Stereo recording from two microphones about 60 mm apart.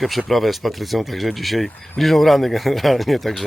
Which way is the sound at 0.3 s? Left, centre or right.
Centre.